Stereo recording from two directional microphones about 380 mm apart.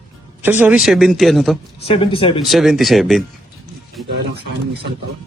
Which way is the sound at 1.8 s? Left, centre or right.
Centre.